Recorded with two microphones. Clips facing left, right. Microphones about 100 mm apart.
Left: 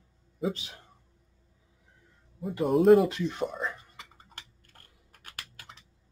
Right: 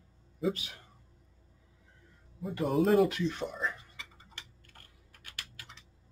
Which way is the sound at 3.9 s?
45° left (ahead or behind).